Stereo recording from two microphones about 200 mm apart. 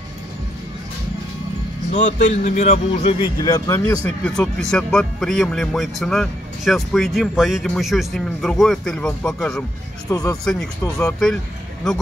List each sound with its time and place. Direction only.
1.9 s a man's voice: 35° left (ahead or behind); by 9.7 s 5° left (ahead or behind)
10.0 s speech: 15° left (ahead or behind)
10.3 s a man's voice: 5° left (ahead or behind)